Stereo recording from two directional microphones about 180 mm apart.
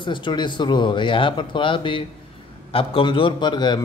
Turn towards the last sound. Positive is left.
turn(degrees=25)  # may be behind; listen again after turning